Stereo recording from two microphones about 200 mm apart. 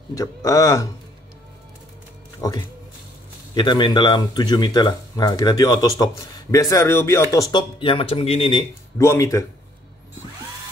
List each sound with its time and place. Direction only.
0.1 s speech: 15° left (ahead or behind)
2.4 s speech: 15° left (ahead or behind)
8.9 s speech: 15° left (ahead or behind)